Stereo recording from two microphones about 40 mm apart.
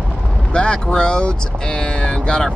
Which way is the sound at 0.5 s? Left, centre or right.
Left.